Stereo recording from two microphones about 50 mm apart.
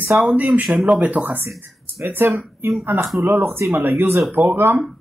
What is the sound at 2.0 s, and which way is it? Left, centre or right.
A man's voice, right.